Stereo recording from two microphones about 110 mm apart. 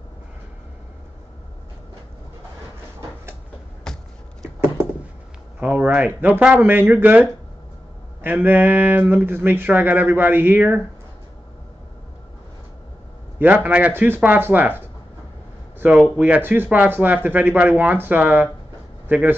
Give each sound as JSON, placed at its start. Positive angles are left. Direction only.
{"t": 3.8, "sound": "a sound", "side_deg": 5}
{"t": 5.6, "sound": "speech", "side_deg": -15}
{"t": 13.4, "sound": "speech", "side_deg": -15}
{"t": 16.2, "sound": "speech", "side_deg": -15}